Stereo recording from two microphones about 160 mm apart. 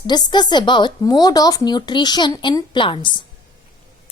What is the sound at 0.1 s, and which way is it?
Speech, 25° left (ahead or behind).